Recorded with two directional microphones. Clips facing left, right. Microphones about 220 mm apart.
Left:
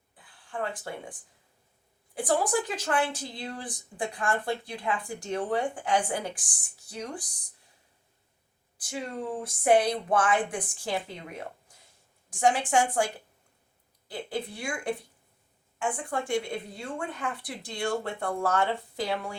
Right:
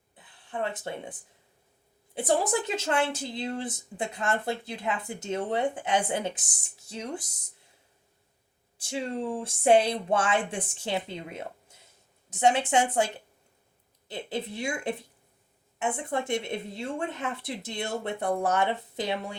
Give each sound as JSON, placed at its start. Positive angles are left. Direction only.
{"t": 0.2, "sound": "a sound", "side_deg": -20}
{"t": 2.1, "sound": "speech", "side_deg": -25}
{"t": 8.8, "sound": "speech", "side_deg": -25}
{"t": 14.1, "sound": "speech", "side_deg": -25}